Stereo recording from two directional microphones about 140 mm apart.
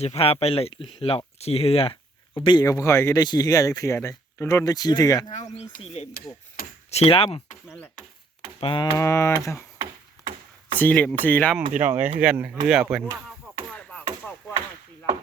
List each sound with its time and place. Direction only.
0.0 s speech: 45° left (ahead or behind); by 5.3 s 25° left (ahead or behind)
5.3 s speech: 55° left (ahead or behind)
6.6 s speech: 90° left
6.9 s speech: 45° left (ahead or behind)
8.6 s a sound: 35° left (ahead or behind)
9.0 s speech: 20° left (ahead or behind)
9.7 s chop: 20° right (ahead or behind)
10.8 s speech: 10° left (ahead or behind)
12.2 s speech: 10° right (ahead or behind)
13.7 s chop: 10° left (ahead or behind)